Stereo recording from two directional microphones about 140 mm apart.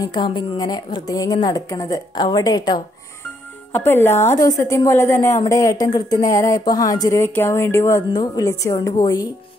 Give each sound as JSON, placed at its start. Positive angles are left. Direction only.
{"t": 0.0, "sound": "a woman's voice", "side_deg": 30}
{"t": 3.7, "sound": "a woman's voice", "side_deg": 15}